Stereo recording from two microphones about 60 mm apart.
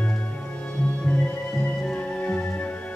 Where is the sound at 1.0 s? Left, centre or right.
Left.